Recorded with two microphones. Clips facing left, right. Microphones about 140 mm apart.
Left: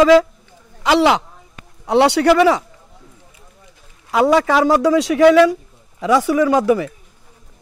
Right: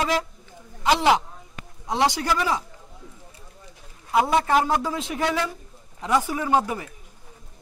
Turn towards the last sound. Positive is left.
turn(degrees=90)